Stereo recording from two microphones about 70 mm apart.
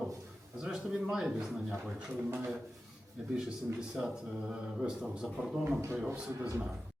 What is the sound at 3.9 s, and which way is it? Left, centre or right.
A man's voice, centre.